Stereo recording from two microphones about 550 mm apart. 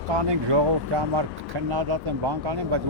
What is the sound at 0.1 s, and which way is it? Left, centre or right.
Speech, right.